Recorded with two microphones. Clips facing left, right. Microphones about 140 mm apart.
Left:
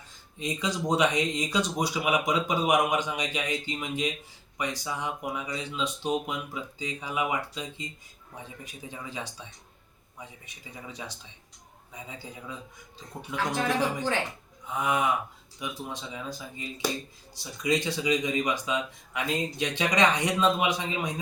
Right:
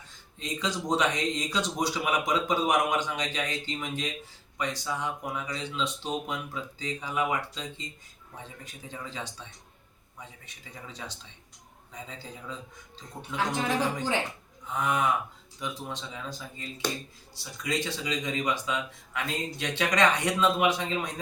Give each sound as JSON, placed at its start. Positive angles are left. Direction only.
{"t": 0.3, "sound": "speech", "side_deg": 15}
{"t": 12.0, "sound": "speech", "side_deg": 10}
{"t": 14.8, "sound": "speech", "side_deg": 10}